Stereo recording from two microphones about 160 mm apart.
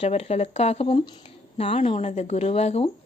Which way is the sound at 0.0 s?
40° left (ahead or behind).